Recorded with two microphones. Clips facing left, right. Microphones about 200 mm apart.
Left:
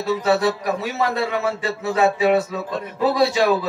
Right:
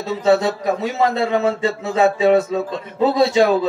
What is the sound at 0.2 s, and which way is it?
A man's voice, 20° right (ahead or behind).